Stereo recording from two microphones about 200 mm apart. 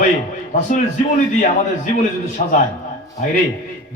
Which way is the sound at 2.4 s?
40° left (ahead or behind).